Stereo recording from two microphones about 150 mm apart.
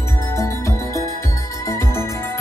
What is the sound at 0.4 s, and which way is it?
Music, 20° left (ahead or behind).